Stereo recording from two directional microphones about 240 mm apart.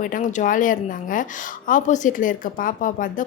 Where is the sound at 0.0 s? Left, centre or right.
Left.